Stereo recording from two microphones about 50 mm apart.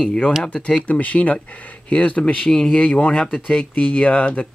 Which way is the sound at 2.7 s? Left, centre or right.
Left.